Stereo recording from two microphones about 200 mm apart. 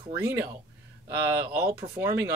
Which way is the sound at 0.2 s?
10° right (ahead or behind).